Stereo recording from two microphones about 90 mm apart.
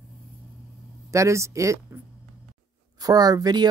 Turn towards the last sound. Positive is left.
turn(degrees=-50)  # may be behind; listen again after turning